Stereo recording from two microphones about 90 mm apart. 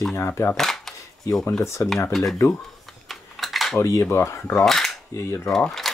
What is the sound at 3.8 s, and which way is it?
Speech, 30° left (ahead or behind).